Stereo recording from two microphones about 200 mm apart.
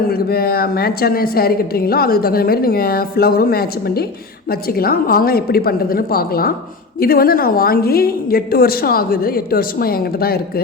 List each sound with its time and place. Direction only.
0.1 s a woman's voice: 50° left (ahead or behind)